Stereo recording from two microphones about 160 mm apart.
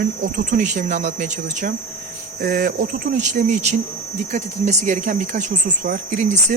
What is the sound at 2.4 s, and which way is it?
Speech, 70° right (ahead or behind).